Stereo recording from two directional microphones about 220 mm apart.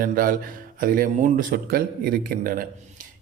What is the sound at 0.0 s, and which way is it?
A man's voice, 40° right (ahead or behind).